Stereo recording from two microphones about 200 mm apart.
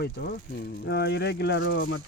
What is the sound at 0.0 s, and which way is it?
Speech, 55° left (ahead or behind).